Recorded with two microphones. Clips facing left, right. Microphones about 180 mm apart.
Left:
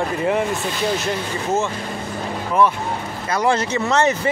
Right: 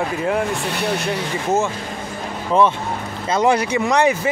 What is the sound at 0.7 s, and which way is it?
Speech, 65° right (ahead or behind).